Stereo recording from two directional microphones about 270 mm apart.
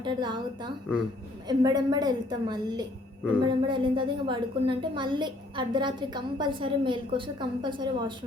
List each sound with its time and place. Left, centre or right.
0.0 s a woman's voice: centre